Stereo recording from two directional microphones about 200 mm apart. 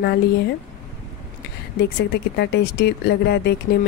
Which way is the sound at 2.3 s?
55° left (ahead or behind).